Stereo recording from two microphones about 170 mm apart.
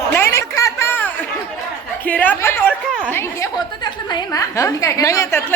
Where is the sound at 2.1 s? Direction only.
10° left (ahead or behind).